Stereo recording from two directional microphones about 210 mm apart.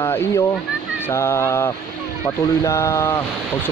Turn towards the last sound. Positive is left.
turn(degrees=15)  # may be behind; listen again after turning